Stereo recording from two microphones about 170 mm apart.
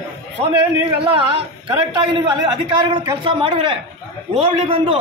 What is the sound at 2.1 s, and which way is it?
A man's voice, 30° right (ahead or behind).